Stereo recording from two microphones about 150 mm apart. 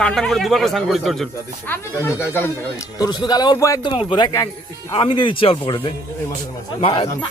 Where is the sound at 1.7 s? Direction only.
15° left (ahead or behind).